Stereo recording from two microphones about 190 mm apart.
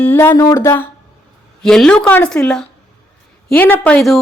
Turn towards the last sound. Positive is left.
turn(degrees=5)  # may be behind; listen again after turning